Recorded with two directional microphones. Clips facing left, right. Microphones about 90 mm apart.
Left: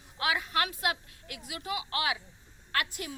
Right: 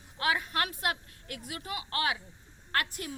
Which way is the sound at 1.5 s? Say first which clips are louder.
Left 4 dB; 40° right (ahead or behind).